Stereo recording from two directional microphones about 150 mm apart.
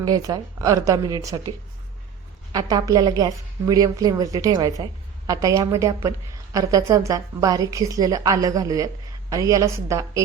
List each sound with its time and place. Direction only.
0.0 s a woman's voice: 25° right (ahead or behind)